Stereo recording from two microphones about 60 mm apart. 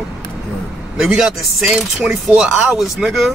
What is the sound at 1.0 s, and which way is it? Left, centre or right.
A man's voice, centre.